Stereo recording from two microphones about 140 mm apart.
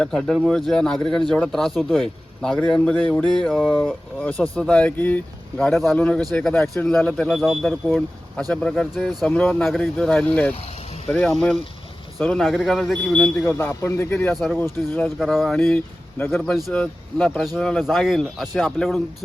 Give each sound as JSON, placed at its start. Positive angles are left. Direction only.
{"t": 0.0, "sound": "speech", "side_deg": 0}
{"t": 3.5, "sound": "speech", "side_deg": -5}
{"t": 4.2, "sound": "speech", "side_deg": 10}
{"t": 13.4, "sound": "speech", "side_deg": 20}
{"t": 14.3, "sound": "speech", "side_deg": 0}
{"t": 16.3, "sound": "speech", "side_deg": 0}